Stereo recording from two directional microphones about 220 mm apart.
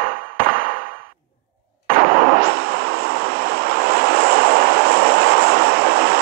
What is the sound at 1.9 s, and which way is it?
Vehicle, 40° right (ahead or behind).